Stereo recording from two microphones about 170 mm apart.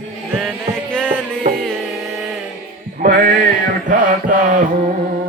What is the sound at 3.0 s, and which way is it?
Music, 65° right (ahead or behind).